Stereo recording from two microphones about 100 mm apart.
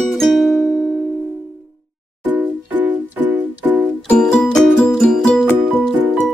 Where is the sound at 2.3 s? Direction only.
15° right (ahead or behind).